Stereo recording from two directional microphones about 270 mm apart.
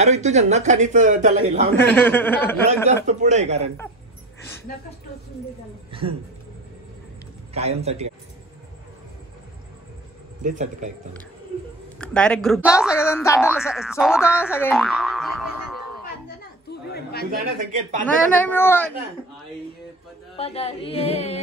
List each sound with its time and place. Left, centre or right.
0.0 s a man's voice: right
2.0 s speech: centre
3.1 s a man's voice: right
5.9 s speech: centre
7.5 s a man's voice: right
10.4 s a man's voice: right
12.0 s speech: centre
12.9 s speech: centre
13.4 s speech: centre
16.9 s chatter: left
17.6 s a man's voice: right
18.0 s speech: centre
20.3 s music: left